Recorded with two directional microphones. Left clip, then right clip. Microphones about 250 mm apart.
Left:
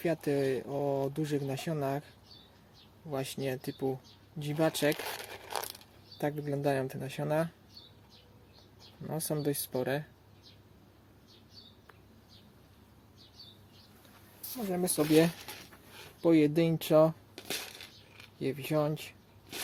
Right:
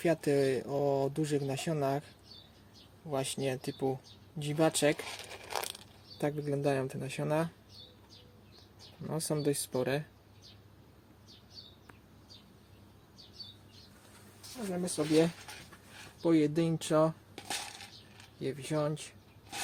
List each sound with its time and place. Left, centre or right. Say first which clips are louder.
0.0 s speech: right 2 dB; centre
9.0 s speech: right 1 dB; centre
14.5 s speech: left 4 dB; left
16.2 s speech: left 3 dB; left
18.3 s speech: left 3 dB; left